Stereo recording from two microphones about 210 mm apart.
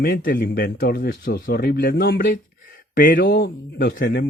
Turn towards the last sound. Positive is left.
turn(degrees=50)  # may be behind; listen again after turning